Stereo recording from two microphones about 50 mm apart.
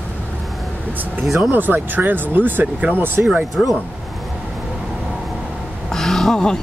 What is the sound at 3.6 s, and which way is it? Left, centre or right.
Speech, centre.